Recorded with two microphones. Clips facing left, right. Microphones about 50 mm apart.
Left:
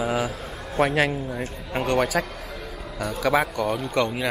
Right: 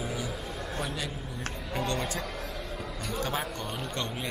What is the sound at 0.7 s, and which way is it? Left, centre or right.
Speech, left.